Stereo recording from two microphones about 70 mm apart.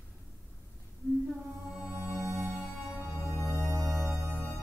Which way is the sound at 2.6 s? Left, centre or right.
Centre.